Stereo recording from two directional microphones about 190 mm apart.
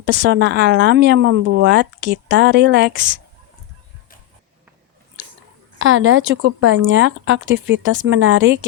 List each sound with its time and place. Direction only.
0.0 s speech: 65° right (ahead or behind)
5.8 s speech: 90° right